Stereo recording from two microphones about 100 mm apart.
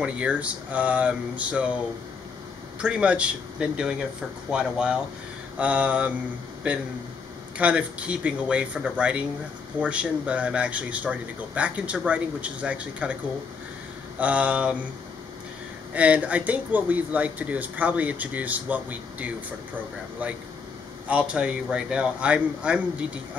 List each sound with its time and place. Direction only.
0.0 s speech: 10° right (ahead or behind)
2.8 s speech: 10° right (ahead or behind)
14.2 s speech: 15° right (ahead or behind)
15.9 s speech: 15° right (ahead or behind)
21.1 s speech: 10° right (ahead or behind)